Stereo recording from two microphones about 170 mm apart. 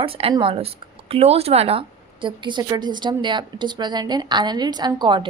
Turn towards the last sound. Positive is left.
turn(degrees=-25)  # may be behind; listen again after turning